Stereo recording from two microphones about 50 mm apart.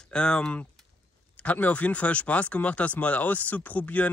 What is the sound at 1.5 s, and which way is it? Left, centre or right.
Speech, left.